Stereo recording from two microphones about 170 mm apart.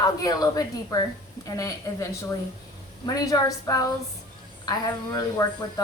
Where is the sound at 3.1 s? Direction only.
20° left (ahead or behind).